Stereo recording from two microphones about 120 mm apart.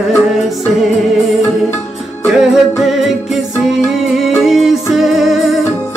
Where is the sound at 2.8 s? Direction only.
Centre (ahead or behind).